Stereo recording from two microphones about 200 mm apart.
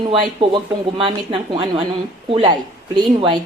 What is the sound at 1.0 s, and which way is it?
Speech, 25° right (ahead or behind).